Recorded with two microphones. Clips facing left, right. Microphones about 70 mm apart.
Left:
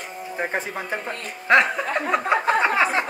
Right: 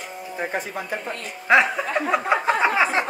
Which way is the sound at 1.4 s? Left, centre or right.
Centre.